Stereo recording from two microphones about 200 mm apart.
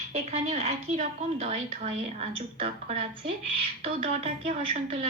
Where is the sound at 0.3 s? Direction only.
35° right (ahead or behind).